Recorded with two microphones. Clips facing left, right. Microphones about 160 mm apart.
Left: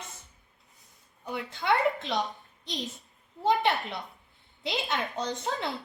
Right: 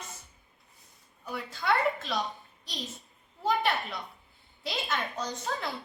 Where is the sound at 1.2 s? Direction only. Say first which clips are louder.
Left 1 dB; 20° left (ahead or behind).